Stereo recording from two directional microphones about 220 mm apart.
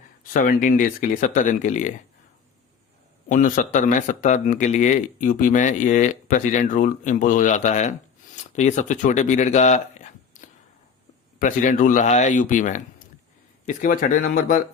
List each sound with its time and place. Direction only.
0.3 s speech: 40° left (ahead or behind)
3.2 s speech: 35° left (ahead or behind)